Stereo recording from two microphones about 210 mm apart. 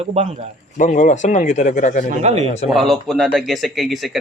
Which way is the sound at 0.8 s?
35° left (ahead or behind).